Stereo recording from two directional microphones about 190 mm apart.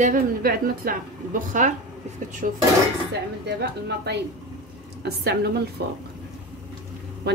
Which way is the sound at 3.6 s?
60° right (ahead or behind).